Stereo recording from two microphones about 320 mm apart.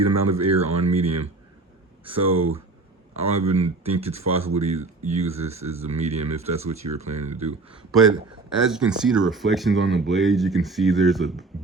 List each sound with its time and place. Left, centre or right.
0.4 s speech: centre
8.5 s speech: centre